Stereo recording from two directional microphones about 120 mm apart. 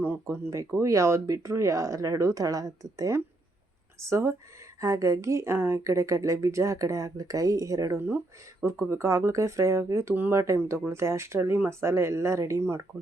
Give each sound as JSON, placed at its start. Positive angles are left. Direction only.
{"t": 0.0, "sound": "a woman's voice", "side_deg": -20}